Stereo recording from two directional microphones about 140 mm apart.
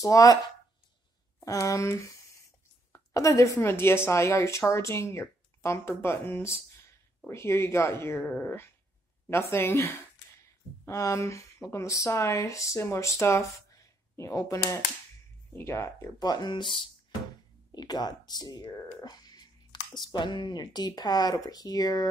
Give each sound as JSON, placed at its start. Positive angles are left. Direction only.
{"t": 0.0, "sound": "speech", "side_deg": 25}
{"t": 1.4, "sound": "speech", "side_deg": 25}